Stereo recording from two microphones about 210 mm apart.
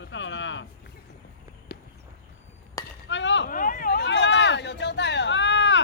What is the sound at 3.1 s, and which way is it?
Speech, 60° left (ahead or behind).